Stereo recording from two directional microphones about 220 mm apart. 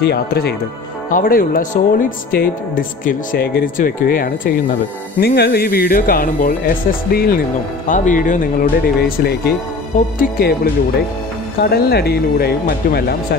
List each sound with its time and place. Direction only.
0.0 s speech: 45° left (ahead or behind)